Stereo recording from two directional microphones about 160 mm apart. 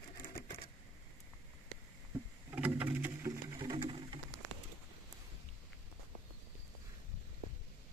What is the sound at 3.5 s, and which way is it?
Sewing machine, 30° right (ahead or behind).